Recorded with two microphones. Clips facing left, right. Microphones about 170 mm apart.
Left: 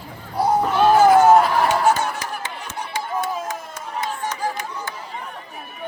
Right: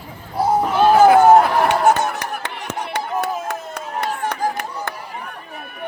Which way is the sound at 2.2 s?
60° right (ahead or behind).